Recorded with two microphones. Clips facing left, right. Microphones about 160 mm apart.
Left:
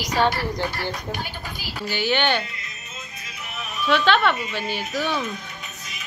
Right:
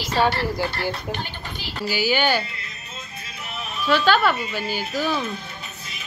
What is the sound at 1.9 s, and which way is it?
Speech, 5° right (ahead or behind).